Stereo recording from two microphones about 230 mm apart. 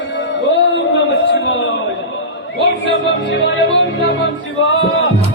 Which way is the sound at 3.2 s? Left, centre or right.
Left.